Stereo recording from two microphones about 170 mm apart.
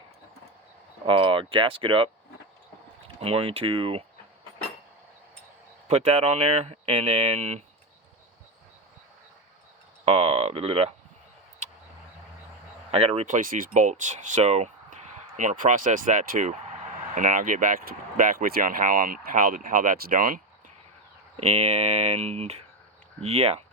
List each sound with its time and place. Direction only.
1.0 s speech: 30° right (ahead or behind)
3.2 s speech: 35° right (ahead or behind)
5.9 s speech: 40° right (ahead or behind)
10.1 s speech: 40° right (ahead or behind)
12.9 s speech: 35° right (ahead or behind); by 20.4 s 55° right (ahead or behind)
21.3 s speech: 40° right (ahead or behind)